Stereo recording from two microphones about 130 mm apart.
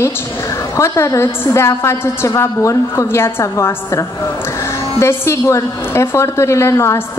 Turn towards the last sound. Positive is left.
turn(degrees=20)  # may be behind; listen again after turning